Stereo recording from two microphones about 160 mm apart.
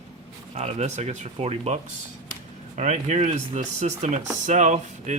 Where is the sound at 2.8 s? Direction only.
45° right (ahead or behind).